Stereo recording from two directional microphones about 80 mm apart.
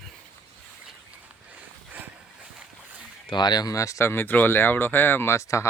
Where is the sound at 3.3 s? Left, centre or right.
Left.